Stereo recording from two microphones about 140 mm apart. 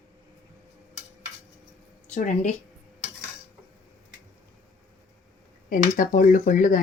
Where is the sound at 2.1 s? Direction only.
60° left (ahead or behind).